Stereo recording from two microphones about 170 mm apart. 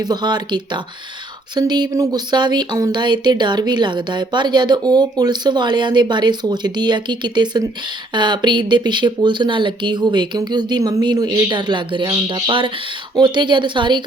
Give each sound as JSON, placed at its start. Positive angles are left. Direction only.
{"t": 0.0, "sound": "speech", "side_deg": -25}